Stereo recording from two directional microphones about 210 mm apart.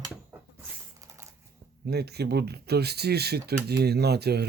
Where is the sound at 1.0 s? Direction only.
15° right (ahead or behind).